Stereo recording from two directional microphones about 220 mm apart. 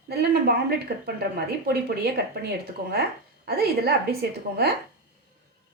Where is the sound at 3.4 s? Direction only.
45° right (ahead or behind).